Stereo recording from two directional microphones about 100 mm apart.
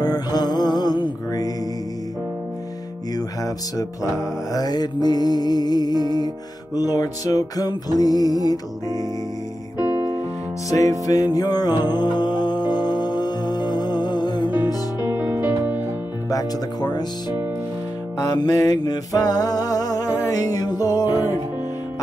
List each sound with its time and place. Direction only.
0.0 s music: 40° left (ahead or behind)
3.2 s music: 35° left (ahead or behind)
15.0 s music: 20° right (ahead or behind)
16.3 s music: 40° left (ahead or behind)
18.2 s music: 40° left (ahead or behind)